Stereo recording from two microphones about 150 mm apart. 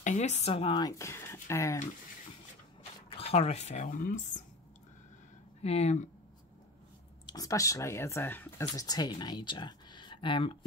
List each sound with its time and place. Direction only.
0.0 s speech: 50° left (ahead or behind); by 1.8 s 20° left (ahead or behind)
3.2 s speech: 45° left (ahead or behind); by 4.4 s 60° left (ahead or behind)
5.6 s speech: 45° left (ahead or behind)
7.2 s speech: 25° left (ahead or behind)